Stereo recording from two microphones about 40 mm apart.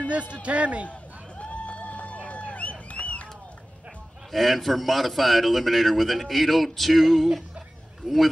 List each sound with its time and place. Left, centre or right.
0.1 s a man's voice: right
1.4 s a sound: left
4.3 s speech: centre